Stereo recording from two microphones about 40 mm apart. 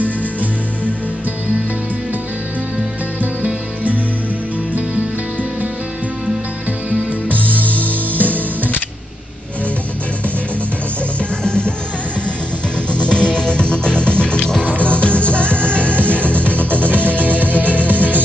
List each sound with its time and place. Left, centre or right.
3.2 s music: right
7.2 s music: right
7.6 s music: left
8.1 s music: right
11.4 s music: left
12.9 s music: left
15.9 s music: right